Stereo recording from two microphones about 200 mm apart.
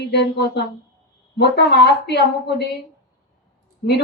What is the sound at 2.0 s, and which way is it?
Speech, 55° left (ahead or behind).